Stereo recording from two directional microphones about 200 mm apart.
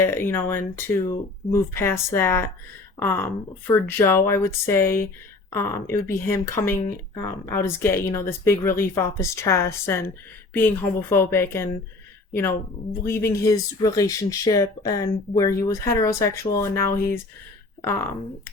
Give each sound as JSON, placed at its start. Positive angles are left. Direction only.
{"t": 0.0, "sound": "speech", "side_deg": 10}